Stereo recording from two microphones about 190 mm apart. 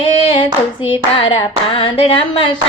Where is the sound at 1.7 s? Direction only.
30° left (ahead or behind).